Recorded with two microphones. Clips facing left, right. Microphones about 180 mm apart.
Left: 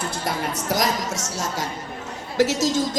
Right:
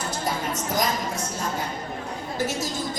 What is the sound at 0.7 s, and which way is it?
A woman's voice, 90° left.